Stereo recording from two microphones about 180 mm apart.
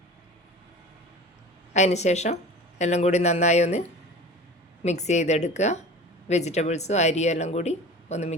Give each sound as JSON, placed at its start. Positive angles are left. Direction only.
{"t": 1.7, "sound": "speech", "side_deg": 40}